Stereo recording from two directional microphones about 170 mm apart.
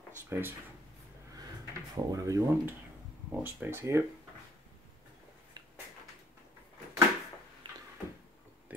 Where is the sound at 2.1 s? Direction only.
20° right (ahead or behind).